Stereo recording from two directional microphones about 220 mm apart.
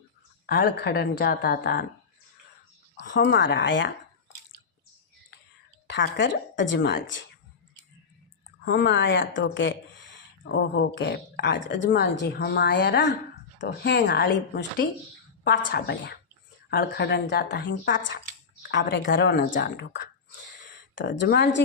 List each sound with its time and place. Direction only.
0.4 s a woman's voice: 45° left (ahead or behind)
3.0 s a woman's voice: 50° left (ahead or behind)
5.9 s a woman's voice: 55° left (ahead or behind)
8.6 s a woman's voice: 50° left (ahead or behind)